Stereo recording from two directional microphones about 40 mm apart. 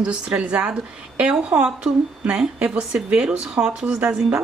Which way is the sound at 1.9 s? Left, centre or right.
Centre.